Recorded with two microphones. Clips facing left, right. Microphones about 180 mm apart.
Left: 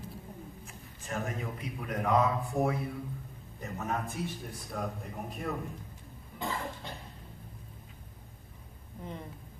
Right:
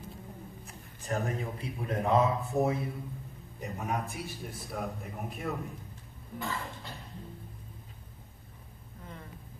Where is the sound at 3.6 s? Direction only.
15° right (ahead or behind).